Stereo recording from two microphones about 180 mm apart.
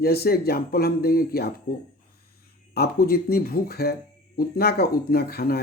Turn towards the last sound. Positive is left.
turn(degrees=60)  # may be behind; listen again after turning